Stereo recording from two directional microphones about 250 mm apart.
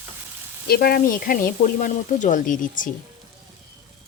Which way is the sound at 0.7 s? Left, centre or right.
Left.